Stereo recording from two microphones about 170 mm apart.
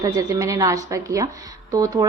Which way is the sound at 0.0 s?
20° right (ahead or behind).